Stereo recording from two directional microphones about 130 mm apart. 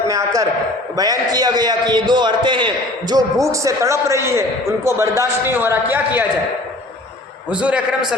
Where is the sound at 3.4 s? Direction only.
25° right (ahead or behind).